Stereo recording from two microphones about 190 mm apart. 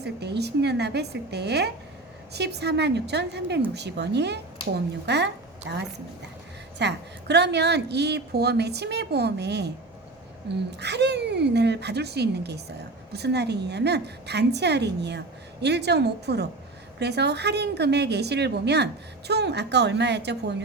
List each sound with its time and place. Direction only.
0.0 s a woman's voice: 60° right (ahead or behind)